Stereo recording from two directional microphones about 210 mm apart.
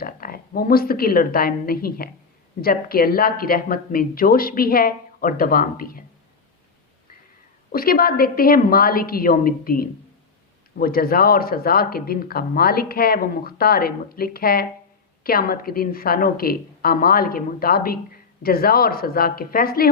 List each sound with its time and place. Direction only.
0.0 s speech: 45° left (ahead or behind)
7.7 s speech: 45° left (ahead or behind)